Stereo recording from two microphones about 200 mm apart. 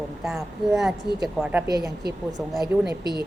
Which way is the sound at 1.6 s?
20° right (ahead or behind).